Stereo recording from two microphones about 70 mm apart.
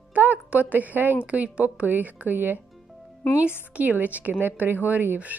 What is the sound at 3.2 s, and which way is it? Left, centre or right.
Speech, centre.